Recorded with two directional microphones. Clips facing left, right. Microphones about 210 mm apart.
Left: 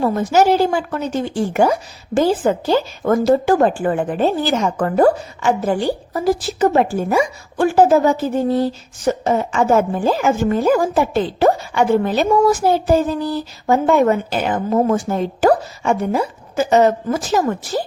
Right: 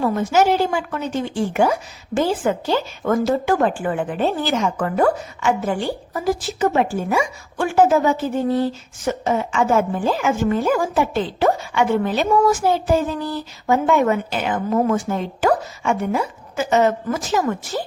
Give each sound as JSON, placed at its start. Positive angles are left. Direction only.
{"t": 0.0, "sound": "speech", "side_deg": 35}